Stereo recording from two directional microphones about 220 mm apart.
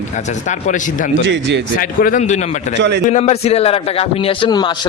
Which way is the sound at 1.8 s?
40° left (ahead or behind).